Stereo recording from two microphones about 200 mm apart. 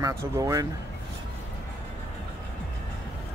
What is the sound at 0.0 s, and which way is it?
Speech, 15° right (ahead or behind).